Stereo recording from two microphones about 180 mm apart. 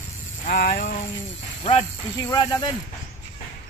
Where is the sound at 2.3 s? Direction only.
20° left (ahead or behind).